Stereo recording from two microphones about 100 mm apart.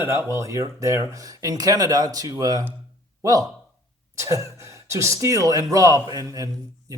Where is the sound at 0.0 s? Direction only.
25° right (ahead or behind).